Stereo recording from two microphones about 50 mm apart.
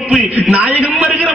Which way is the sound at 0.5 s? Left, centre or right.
Right.